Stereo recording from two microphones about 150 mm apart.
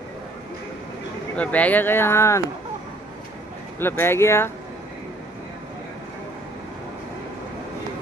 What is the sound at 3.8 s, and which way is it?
Speech, 15° left (ahead or behind).